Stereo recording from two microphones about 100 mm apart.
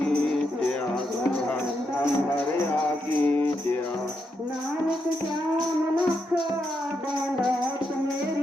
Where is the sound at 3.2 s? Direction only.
15° left (ahead or behind).